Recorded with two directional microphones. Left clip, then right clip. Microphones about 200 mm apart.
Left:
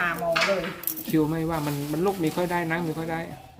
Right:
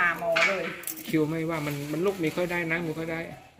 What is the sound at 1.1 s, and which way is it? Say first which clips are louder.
Speech: left 2 dB; 10° right (ahead or behind).